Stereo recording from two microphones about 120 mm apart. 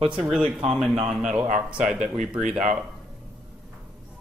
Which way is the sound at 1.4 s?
90° right.